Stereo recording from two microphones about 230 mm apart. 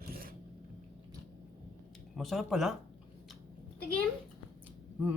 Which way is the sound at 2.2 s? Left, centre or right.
Centre.